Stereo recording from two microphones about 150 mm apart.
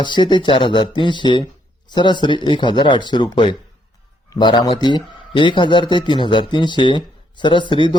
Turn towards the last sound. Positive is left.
turn(degrees=35)  # may be behind; listen again after turning